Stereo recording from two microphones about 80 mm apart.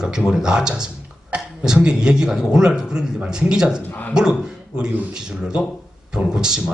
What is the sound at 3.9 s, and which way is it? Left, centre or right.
Speech, left.